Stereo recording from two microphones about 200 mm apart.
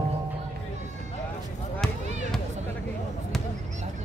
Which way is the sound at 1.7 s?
5° left (ahead or behind).